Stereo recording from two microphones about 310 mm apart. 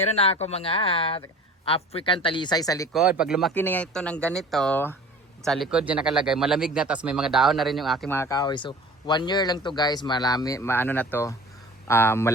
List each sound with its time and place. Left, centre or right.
0.0 s speech: centre
2.9 s speech: centre